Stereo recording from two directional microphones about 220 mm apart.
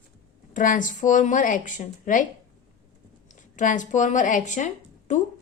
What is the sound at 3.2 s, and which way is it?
Speech, 35° left (ahead or behind).